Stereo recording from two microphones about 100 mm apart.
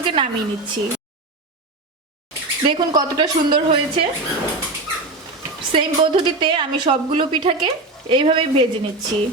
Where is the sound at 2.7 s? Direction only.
45° right (ahead or behind).